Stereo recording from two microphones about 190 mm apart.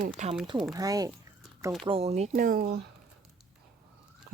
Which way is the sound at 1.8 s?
30° right (ahead or behind).